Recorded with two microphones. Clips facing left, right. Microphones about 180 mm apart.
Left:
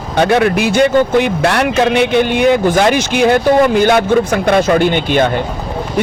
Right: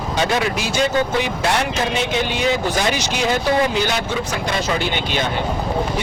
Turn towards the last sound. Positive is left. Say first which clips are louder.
# left 10 dB
turn(degrees=50)  # may be behind; listen again after turning